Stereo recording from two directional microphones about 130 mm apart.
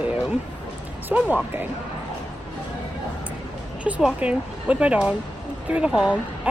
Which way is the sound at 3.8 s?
10° right (ahead or behind).